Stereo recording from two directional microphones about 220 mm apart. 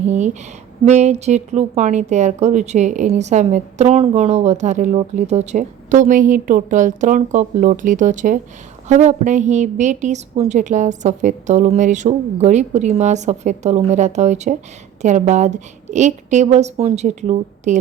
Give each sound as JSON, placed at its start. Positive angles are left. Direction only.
{"t": 0.0, "sound": "a woman's voice", "side_deg": -30}